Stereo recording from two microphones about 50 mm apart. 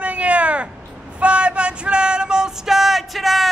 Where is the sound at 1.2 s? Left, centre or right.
Right.